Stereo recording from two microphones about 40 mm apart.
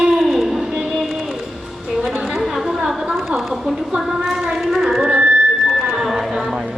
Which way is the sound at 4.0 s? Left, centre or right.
Centre.